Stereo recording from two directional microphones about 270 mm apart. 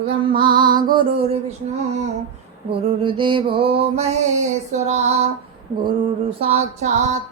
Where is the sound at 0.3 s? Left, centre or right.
Centre.